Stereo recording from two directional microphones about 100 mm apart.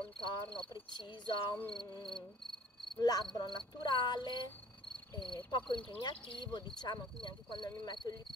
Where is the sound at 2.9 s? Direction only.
45° left (ahead or behind).